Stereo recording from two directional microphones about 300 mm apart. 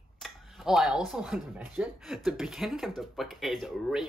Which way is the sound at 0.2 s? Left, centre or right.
Centre.